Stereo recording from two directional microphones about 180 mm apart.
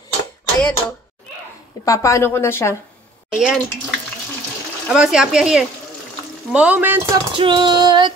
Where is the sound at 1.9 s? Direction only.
15° left (ahead or behind).